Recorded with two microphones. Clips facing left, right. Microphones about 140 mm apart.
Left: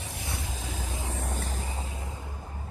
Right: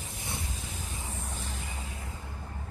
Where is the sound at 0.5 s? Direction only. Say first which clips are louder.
Left 5 dB; 90° left; by 1.5 s 55° left (ahead or behind).